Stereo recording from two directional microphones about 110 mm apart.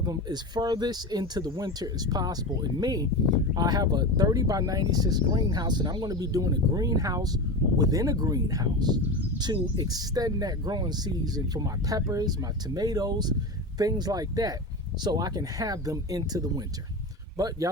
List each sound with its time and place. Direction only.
0.0 s speech: 40° right (ahead or behind)